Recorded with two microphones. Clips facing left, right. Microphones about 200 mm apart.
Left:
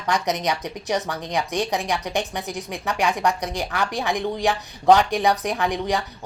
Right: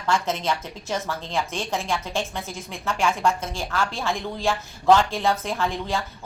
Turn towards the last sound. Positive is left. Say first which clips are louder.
# left 3 dB
turn(degrees=15)  # may be behind; listen again after turning